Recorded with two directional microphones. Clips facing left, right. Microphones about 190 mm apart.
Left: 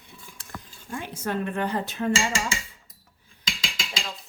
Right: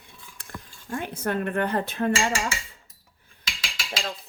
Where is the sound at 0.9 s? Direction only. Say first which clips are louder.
Right 2 dB; 55° right (ahead or behind).